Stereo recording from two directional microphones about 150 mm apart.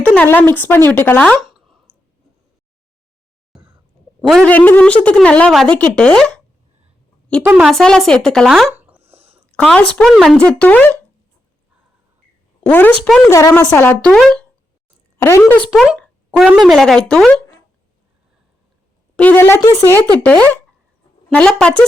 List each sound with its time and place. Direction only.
0.0 s a woman's voice: 10° left (ahead or behind)
1.4 s a sound: centre (ahead or behind)
3.5 s a sound: 5° right (ahead or behind)
4.3 s a woman's voice: 5° left (ahead or behind)
7.4 s a woman's voice: 10° right (ahead or behind)
7.7 s speech: centre (ahead or behind)
8.7 s a sound: 10° right (ahead or behind)
9.0 s a sound: 40° right (ahead or behind)
9.5 s a woman's voice: 5° left (ahead or behind)
12.6 s a woman's voice: 10° left (ahead or behind)
15.7 s speech: centre (ahead or behind)
19.1 s a woman's voice: 10° left (ahead or behind)